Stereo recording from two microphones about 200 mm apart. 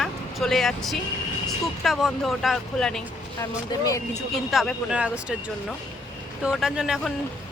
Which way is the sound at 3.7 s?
15° left (ahead or behind).